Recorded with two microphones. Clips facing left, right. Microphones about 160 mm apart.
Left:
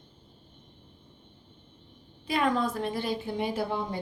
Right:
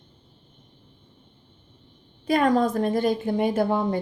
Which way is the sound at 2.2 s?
45° right (ahead or behind).